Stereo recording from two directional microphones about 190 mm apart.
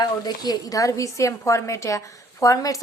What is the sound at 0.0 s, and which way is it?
A woman's voice, 20° left (ahead or behind).